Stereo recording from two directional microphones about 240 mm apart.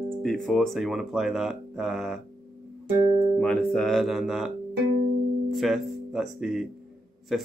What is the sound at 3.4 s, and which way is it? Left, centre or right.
Speech, centre.